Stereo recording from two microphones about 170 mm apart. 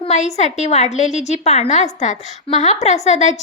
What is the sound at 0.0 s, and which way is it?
A woman's voice, 40° left (ahead or behind).